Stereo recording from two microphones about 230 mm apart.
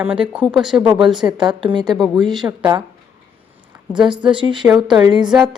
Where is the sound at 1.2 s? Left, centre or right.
Centre.